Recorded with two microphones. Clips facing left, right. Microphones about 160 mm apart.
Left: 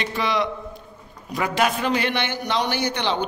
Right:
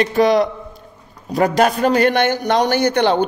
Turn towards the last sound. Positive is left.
turn(degrees=-50)  # may be behind; listen again after turning